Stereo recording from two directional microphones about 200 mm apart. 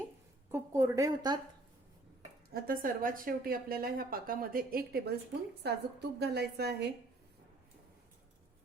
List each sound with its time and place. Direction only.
0.5 s speech: 15° right (ahead or behind)
2.5 s a woman's voice: 45° right (ahead or behind)